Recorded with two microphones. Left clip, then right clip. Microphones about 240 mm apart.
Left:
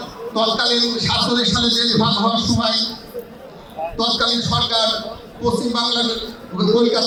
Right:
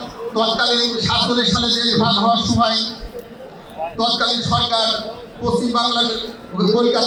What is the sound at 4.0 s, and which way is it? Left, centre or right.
A man's voice, left.